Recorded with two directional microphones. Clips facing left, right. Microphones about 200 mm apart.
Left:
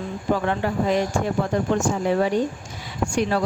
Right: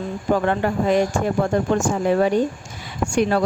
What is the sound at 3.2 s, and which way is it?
Speech, 50° right (ahead or behind).